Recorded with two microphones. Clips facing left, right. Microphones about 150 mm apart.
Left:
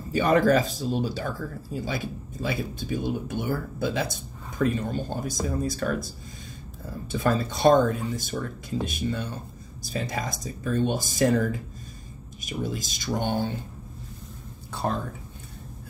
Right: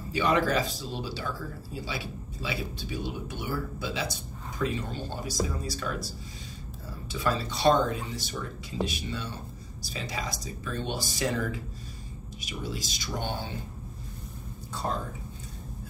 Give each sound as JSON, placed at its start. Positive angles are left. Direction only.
{"t": 0.1, "sound": "speech", "side_deg": 45}